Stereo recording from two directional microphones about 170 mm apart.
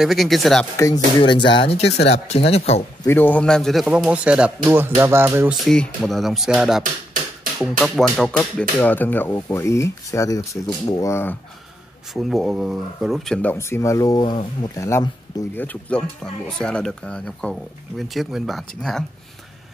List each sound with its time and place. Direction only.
0.0 s speech: centre (ahead or behind)
1.2 s speech: 30° left (ahead or behind)
3.0 s a man's voice: 10° left (ahead or behind); by 5.5 s 15° right (ahead or behind)
5.5 s speech: centre (ahead or behind)
12.1 s speech: centre (ahead or behind)